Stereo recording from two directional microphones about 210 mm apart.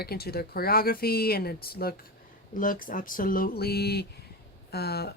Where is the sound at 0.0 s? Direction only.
50° left (ahead or behind).